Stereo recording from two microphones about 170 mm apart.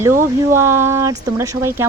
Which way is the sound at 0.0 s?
15° right (ahead or behind).